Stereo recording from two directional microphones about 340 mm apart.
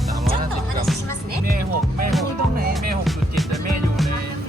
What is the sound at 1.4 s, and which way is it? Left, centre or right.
Music, right.